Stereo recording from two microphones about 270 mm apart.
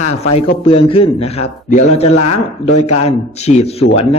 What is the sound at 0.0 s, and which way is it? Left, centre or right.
Speech, left.